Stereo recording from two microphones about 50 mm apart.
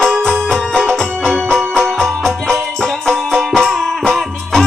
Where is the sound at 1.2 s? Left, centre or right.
Centre.